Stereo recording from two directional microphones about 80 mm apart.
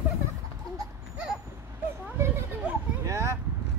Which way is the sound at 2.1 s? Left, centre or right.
Right.